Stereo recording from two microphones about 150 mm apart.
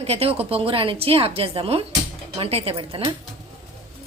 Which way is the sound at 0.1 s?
40° right (ahead or behind).